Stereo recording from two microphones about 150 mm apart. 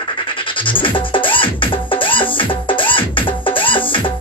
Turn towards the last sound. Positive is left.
turn(degrees=35)  # may be behind; listen again after turning